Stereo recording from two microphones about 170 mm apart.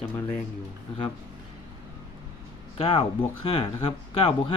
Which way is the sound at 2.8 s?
30° left (ahead or behind).